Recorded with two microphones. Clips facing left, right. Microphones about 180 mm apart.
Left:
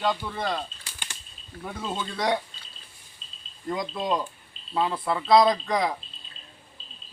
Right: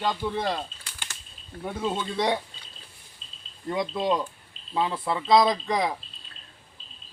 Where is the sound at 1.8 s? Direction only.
25° right (ahead or behind).